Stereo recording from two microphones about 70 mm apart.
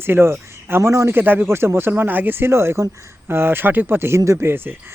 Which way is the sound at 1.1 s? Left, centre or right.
Right.